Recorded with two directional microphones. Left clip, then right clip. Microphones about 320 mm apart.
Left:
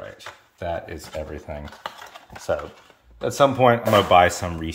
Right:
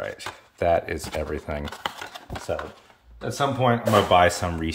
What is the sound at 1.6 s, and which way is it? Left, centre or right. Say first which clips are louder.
Cutlery: right 4 dB; right.